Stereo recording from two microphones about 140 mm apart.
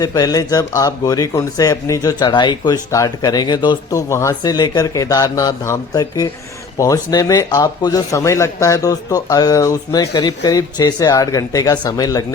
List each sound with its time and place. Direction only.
0.0 s speech: 25° left (ahead or behind)
4.1 s speech: 20° left (ahead or behind)